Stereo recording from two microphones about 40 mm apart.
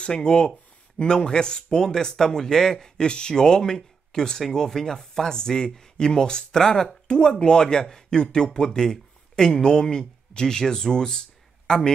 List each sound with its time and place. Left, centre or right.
0.0 s speech: left